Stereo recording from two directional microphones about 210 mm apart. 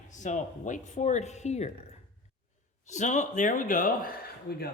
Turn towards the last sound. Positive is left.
turn(degrees=45)  # may be behind; listen again after turning